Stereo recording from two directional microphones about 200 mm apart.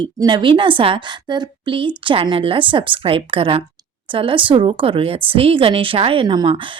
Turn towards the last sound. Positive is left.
turn(degrees=-25)  # may be behind; listen again after turning